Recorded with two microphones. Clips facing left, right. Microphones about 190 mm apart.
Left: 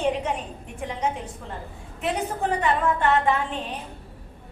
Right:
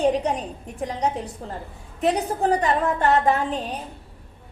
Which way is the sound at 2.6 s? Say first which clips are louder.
Right 1 dB; 40° right (ahead or behind).